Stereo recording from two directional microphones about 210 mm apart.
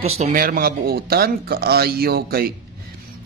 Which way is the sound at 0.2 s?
40° right (ahead or behind).